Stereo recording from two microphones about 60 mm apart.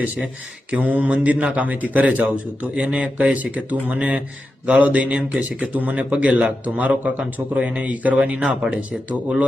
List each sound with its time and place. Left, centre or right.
0.7 s speech: right